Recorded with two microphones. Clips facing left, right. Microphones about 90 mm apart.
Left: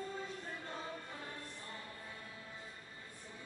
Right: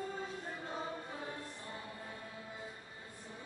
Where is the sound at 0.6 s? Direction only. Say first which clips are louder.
Right 3 dB; 15° right (ahead or behind).